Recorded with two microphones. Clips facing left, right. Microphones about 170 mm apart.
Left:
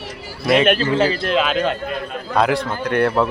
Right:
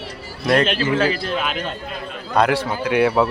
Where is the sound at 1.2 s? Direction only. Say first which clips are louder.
Left 6 dB; 85° left.